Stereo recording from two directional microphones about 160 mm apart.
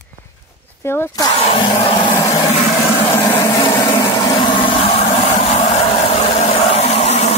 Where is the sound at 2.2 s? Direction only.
20° left (ahead or behind).